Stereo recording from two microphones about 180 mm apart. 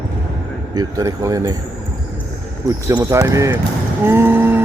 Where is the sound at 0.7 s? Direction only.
20° right (ahead or behind).